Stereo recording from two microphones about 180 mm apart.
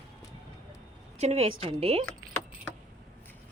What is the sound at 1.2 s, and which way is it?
Speech, 35° right (ahead or behind).